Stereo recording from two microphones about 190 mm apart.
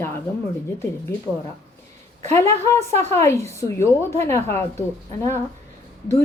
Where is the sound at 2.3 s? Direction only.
15° left (ahead or behind).